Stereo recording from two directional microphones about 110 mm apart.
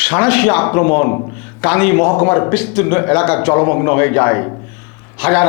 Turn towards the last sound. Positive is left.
turn(degrees=10)  # may be behind; listen again after turning